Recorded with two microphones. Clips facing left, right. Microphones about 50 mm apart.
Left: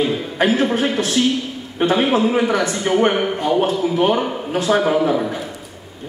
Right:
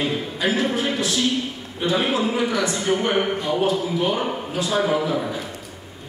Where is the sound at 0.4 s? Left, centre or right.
Left.